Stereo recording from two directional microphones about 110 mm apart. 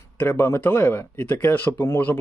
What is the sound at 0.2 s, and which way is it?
Speech, 20° left (ahead or behind).